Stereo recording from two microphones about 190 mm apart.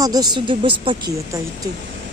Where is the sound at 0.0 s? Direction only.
20° right (ahead or behind).